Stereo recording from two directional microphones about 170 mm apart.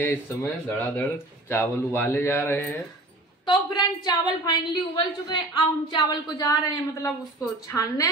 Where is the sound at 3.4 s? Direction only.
25° left (ahead or behind).